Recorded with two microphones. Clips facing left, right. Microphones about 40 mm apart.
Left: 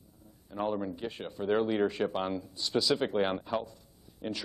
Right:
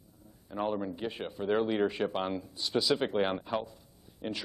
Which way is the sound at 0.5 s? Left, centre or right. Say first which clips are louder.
Even; centre.